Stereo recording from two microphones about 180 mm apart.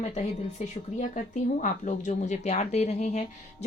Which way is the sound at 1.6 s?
45° left (ahead or behind).